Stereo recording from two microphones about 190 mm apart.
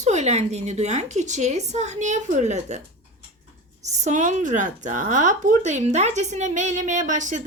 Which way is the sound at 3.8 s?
35° right (ahead or behind).